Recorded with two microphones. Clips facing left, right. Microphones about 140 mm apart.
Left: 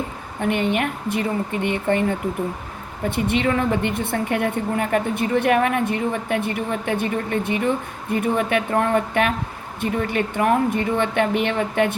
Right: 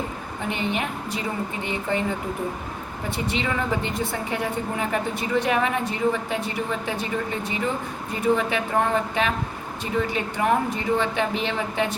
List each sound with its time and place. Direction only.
0.4 s a woman's voice: 55° left (ahead or behind)